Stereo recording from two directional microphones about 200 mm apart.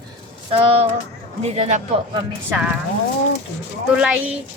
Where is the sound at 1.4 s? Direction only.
35° right (ahead or behind).